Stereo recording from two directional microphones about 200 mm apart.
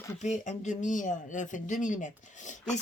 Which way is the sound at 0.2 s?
35° left (ahead or behind).